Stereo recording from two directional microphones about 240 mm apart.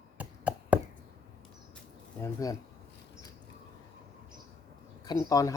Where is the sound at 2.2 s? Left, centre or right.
Centre.